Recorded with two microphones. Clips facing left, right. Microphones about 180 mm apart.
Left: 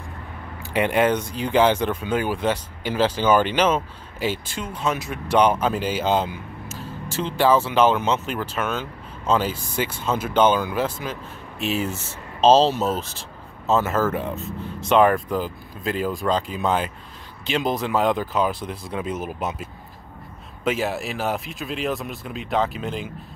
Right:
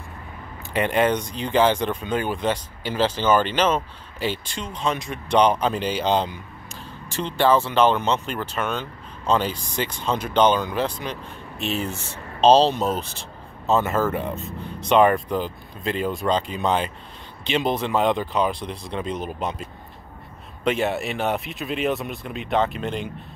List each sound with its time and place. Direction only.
0.7 s speech: 10° left (ahead or behind)